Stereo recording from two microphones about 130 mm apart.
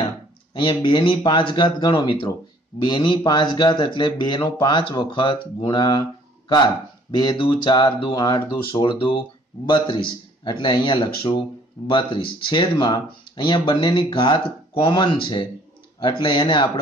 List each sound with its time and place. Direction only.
0.6 s speech: 40° left (ahead or behind)
7.3 s speech: 35° left (ahead or behind)